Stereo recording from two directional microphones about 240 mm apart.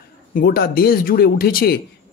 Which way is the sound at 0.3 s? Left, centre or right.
Left.